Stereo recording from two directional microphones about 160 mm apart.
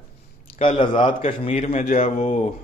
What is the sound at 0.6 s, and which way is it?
Speech, 35° left (ahead or behind).